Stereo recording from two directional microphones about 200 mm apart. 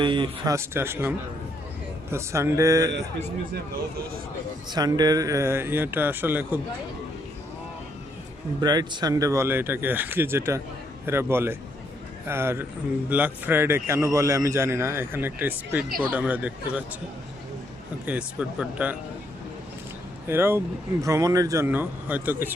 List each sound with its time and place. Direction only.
0.0 s a man's voice: 25° right (ahead or behind)
2.9 s a man's voice: 60° right (ahead or behind)
4.7 s a man's voice: 20° right (ahead or behind)
8.6 s a man's voice: 20° right (ahead or behind)
18.0 s a man's voice: 5° right (ahead or behind)
20.2 s a man's voice: 10° right (ahead or behind)